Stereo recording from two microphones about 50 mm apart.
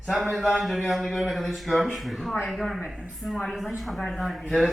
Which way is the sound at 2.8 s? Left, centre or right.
Right.